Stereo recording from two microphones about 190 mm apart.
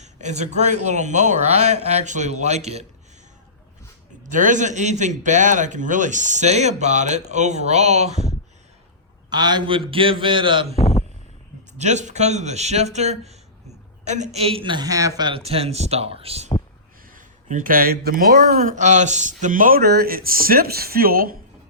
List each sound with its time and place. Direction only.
0.0 s speech: 40° right (ahead or behind)
4.3 s speech: 40° right (ahead or behind)
9.3 s a man's voice: 20° right (ahead or behind)
10.8 s a sound: 30° left (ahead or behind)
11.8 s speech: 40° right (ahead or behind)
17.1 s speech: 45° right (ahead or behind)